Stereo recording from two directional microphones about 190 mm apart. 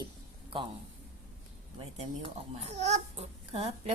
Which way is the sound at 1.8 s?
30° right (ahead or behind).